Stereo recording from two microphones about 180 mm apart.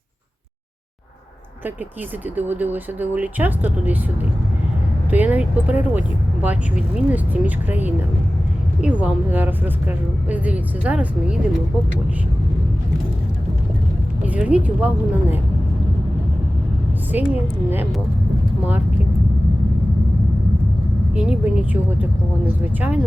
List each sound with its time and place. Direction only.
2.3 s speech: 10° right (ahead or behind)
5.1 s speech: 10° right (ahead or behind)
14.3 s speech: 5° right (ahead or behind)
17.1 s speech: 10° right (ahead or behind)
21.2 s a woman's voice: 5° right (ahead or behind)